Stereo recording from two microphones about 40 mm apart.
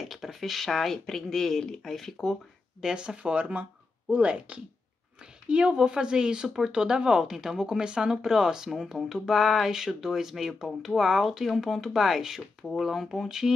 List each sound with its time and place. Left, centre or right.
0.0 s speech: centre
2.8 s speech: centre; by 4.6 s right
5.2 s speech: right; by 13.3 s centre